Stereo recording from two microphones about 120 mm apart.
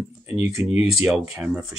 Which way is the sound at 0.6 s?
25° right (ahead or behind).